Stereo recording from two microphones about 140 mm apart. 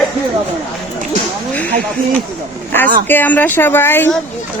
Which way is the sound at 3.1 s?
10° left (ahead or behind).